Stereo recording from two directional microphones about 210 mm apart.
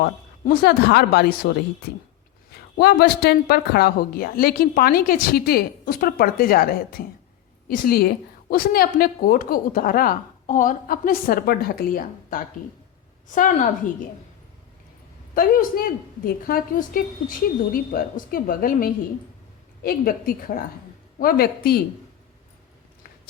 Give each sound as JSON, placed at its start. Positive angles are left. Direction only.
{"t": 0.0, "sound": "a woman's voice", "side_deg": 45}
{"t": 2.7, "sound": "a woman's voice", "side_deg": 50}
{"t": 15.4, "sound": "a woman's voice", "side_deg": 45}